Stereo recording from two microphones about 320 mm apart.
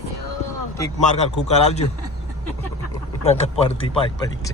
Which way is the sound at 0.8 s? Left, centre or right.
Centre.